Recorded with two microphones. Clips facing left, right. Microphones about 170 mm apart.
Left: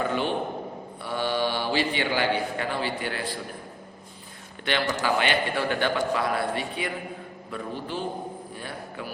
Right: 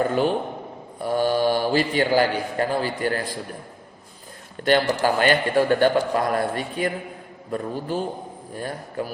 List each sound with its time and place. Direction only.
0.0 s a man's voice: 45° right (ahead or behind)
4.6 s a man's voice: 45° right (ahead or behind)